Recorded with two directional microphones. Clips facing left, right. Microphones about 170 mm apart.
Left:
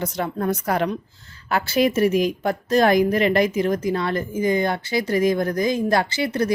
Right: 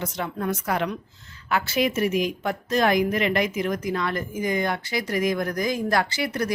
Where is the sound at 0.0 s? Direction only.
40° left (ahead or behind).